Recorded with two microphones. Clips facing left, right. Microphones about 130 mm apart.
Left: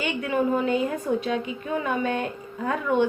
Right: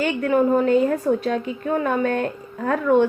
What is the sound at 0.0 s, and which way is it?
Speech, 50° right (ahead or behind).